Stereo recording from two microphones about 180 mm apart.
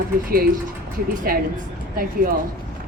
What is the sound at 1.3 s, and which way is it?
Speech, 50° right (ahead or behind).